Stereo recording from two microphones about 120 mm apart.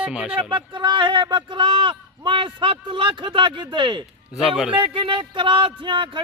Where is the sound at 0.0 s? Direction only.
10° right (ahead or behind).